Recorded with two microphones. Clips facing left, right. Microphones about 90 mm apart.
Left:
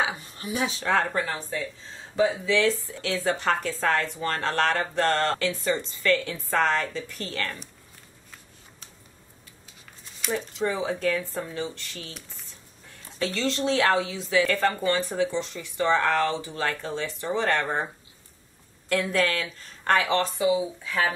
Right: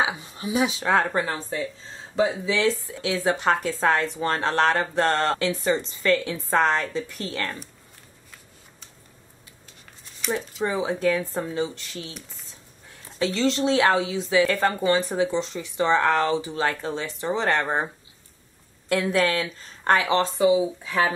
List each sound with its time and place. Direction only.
0.0 s a sound: 15° right (ahead or behind)
0.7 s speech: 20° right (ahead or behind)
2.5 s a woman's voice: 5° right (ahead or behind)
3.2 s speech: 20° right (ahead or behind)
10.6 s speech: 15° right (ahead or behind)
12.0 s speech: centre (ahead or behind)
13.2 s speech: 25° right (ahead or behind)
18.9 s speech: 20° right (ahead or behind)